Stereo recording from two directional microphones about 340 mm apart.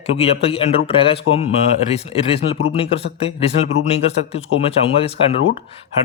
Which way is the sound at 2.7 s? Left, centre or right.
Centre.